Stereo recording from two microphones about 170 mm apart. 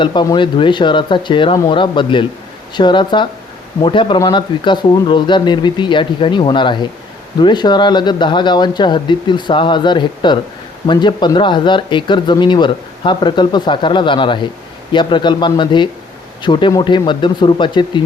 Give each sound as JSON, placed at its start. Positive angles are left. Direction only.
{"t": 0.0, "sound": "speech", "side_deg": 25}